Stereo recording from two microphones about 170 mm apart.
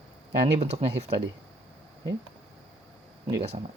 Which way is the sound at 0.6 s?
40° right (ahead or behind).